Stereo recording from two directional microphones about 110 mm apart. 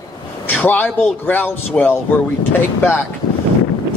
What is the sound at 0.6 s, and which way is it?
Speech, 15° left (ahead or behind).